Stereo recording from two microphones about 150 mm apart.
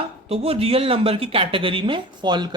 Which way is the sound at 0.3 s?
40° right (ahead or behind).